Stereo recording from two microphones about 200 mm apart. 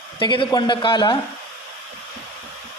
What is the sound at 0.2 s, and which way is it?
Speech, 25° left (ahead or behind).